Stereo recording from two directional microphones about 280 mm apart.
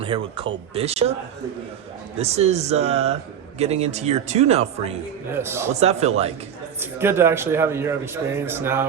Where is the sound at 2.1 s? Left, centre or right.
Right.